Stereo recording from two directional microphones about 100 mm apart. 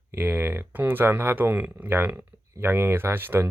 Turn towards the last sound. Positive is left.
turn(degrees=-20)  # may be behind; listen again after turning